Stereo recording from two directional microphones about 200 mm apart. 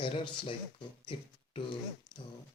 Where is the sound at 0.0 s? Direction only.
25° left (ahead or behind).